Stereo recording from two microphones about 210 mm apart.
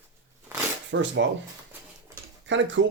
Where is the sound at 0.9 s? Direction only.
60° right (ahead or behind).